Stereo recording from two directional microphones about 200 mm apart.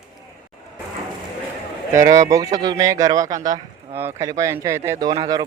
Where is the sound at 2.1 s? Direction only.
15° right (ahead or behind).